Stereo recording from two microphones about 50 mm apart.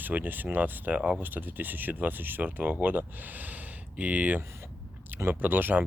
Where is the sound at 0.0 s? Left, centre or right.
Right.